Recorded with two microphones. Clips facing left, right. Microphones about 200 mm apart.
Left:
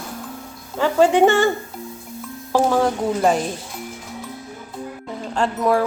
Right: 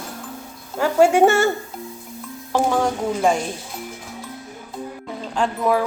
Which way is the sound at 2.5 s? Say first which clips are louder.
Left 2 dB; 5° left (ahead or behind).